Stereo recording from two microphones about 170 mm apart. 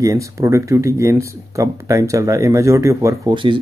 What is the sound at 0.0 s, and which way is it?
Speech, 20° right (ahead or behind).